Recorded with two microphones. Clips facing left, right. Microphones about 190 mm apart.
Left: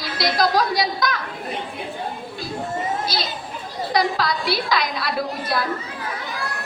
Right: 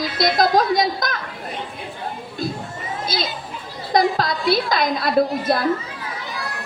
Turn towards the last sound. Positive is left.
turn(degrees=-50)  # may be behind; listen again after turning